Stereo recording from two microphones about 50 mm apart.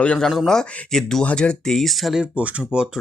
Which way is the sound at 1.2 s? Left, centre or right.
Left.